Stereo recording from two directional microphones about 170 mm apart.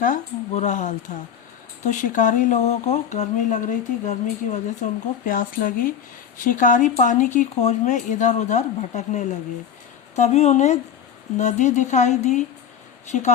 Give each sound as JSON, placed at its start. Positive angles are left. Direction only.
{"t": 0.0, "sound": "a woman's voice", "side_deg": 45}